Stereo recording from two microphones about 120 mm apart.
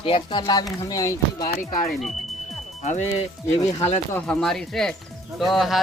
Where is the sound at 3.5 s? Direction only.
70° left (ahead or behind).